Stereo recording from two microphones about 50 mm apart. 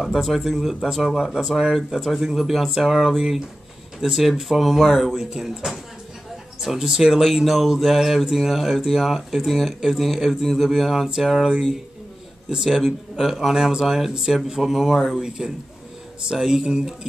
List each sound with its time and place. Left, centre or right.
0.0 s a man's voice: centre